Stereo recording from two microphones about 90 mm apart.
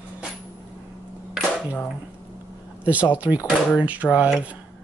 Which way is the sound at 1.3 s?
5° right (ahead or behind).